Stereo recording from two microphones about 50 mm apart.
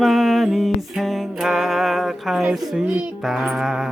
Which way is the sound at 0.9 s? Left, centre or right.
Centre.